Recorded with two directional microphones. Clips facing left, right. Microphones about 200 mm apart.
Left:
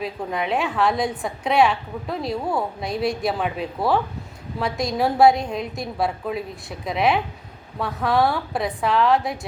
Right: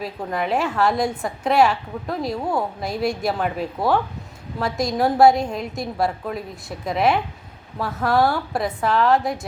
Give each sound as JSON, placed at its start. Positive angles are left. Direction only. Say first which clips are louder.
{"t": 0.0, "sound": "a woman's voice", "louder": "right 1 dB", "side_deg": 0}